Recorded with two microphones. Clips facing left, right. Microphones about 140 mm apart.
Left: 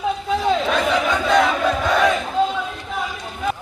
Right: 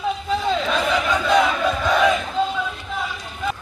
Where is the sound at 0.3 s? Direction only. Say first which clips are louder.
Left 3 dB; 10° left (ahead or behind).